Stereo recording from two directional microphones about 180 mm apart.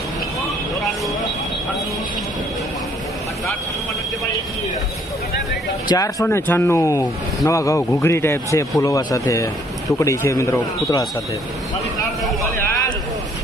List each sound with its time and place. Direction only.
5.9 s speech: 20° left (ahead or behind)